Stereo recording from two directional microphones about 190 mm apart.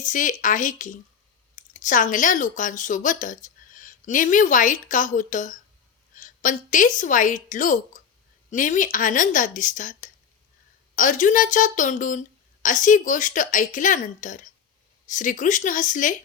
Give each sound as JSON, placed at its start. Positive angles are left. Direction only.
{"t": 0.0, "sound": "a woman's voice", "side_deg": 40}